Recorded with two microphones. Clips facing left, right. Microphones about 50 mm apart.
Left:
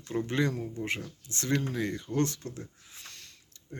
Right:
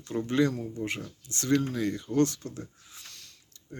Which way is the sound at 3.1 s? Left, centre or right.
Left.